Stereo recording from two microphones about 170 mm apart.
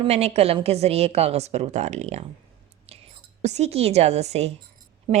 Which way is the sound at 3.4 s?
40° right (ahead or behind).